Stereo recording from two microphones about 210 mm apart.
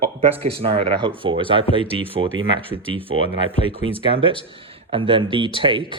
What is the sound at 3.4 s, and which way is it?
A man's voice, 25° right (ahead or behind).